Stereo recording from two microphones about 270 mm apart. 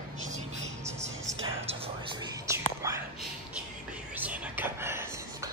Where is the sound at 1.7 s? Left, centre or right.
Right.